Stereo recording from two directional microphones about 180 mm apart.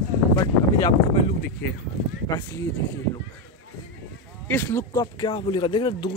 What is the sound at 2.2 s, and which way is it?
Speech, 20° left (ahead or behind).